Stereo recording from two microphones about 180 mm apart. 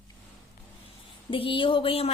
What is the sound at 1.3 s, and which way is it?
Speech, 30° left (ahead or behind).